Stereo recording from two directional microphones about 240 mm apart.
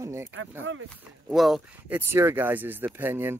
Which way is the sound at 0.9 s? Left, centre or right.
Centre.